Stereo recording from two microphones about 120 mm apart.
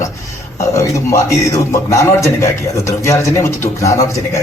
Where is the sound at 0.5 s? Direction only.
25° left (ahead or behind).